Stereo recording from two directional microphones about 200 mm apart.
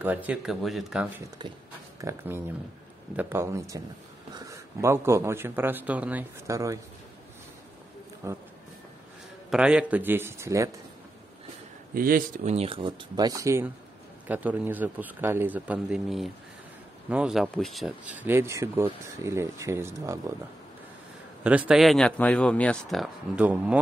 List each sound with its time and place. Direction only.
0.0 s speech: 10° right (ahead or behind)
1.4 s a man's voice: 20° right (ahead or behind)
8.2 s a man's voice: 15° right (ahead or behind)
9.5 s a man's voice: 5° right (ahead or behind)
11.9 s a man's voice: 45° right (ahead or behind); by 20.2 s 15° right (ahead or behind)
21.5 s speech: 5° right (ahead or behind)